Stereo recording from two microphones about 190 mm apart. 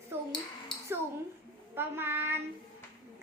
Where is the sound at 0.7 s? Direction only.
25° left (ahead or behind).